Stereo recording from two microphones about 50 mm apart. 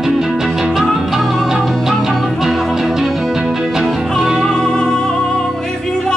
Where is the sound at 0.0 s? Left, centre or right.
Centre.